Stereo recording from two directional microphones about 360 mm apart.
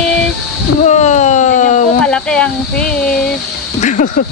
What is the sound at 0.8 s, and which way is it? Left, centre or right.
Speech, centre.